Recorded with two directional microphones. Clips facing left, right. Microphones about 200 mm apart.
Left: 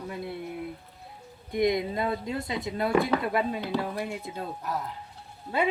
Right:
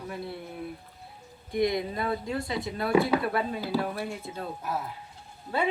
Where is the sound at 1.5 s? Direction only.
20° left (ahead or behind).